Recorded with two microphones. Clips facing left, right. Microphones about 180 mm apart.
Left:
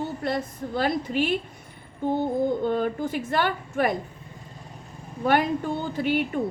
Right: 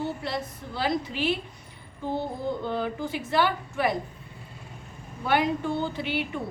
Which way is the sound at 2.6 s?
50° left (ahead or behind).